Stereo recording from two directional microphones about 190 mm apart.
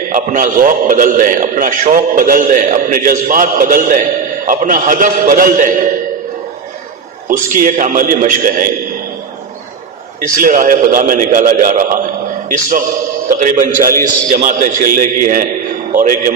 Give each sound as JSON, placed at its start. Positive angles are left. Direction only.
{"t": 0.1, "sound": "a man's voice", "side_deg": -45}
{"t": 7.3, "sound": "a man's voice", "side_deg": -45}
{"t": 10.2, "sound": "a man's voice", "side_deg": -45}